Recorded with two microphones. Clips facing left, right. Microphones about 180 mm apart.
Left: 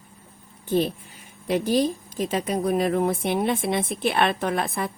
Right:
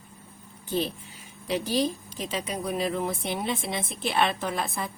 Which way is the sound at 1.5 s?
50° left (ahead or behind).